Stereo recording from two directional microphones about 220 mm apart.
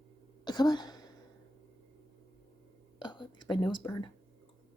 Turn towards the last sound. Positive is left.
turn(degrees=15)  # may be behind; listen again after turning